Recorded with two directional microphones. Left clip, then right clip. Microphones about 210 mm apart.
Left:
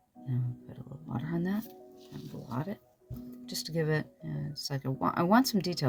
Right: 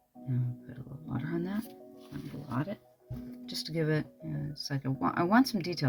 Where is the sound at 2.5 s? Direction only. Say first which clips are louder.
Right 2 dB; 20° left (ahead or behind).